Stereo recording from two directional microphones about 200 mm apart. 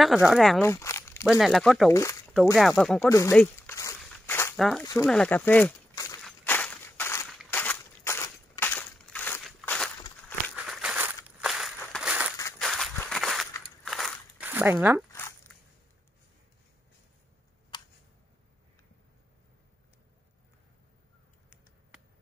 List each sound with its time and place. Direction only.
0.0 s speech: 5° right (ahead or behind)
0.6 s a sound: 15° left (ahead or behind)
1.2 s speech: centre (ahead or behind)
1.9 s speech: 15° left (ahead or behind)
2.8 s speech: 5° left (ahead or behind)
3.1 s walk: 15° left (ahead or behind)
4.6 s speech: centre (ahead or behind)
6.2 s walk: 10° left (ahead or behind)
7.3 s crushing: 10° left (ahead or behind)
10.5 s a sound: centre (ahead or behind)
12.5 s walk: centre (ahead or behind)
13.6 s a sound: centre (ahead or behind)
14.5 s speech: 10° right (ahead or behind)
17.7 s a sound: 25° left (ahead or behind)